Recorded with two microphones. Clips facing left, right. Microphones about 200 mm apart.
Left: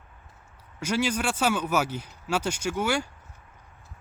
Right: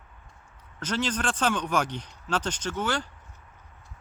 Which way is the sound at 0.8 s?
10° left (ahead or behind).